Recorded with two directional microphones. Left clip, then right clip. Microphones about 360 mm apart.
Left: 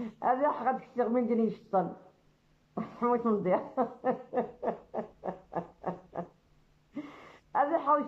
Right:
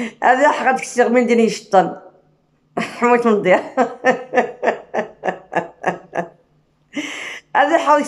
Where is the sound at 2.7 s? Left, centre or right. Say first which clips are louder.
Right 15 dB; centre.